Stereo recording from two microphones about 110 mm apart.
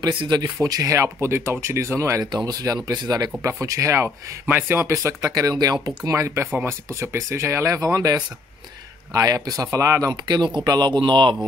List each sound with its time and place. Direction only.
0.2 s speech: 40° right (ahead or behind)
10.2 s speech: 45° right (ahead or behind)